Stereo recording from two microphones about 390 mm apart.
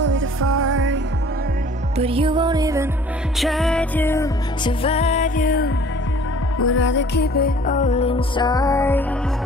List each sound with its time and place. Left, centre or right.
0.0 s music: right
2.0 s music: centre